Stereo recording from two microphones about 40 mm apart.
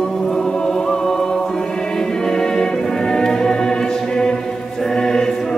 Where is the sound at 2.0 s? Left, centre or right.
Centre.